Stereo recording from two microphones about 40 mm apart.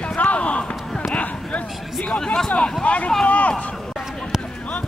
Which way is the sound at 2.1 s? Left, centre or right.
Centre.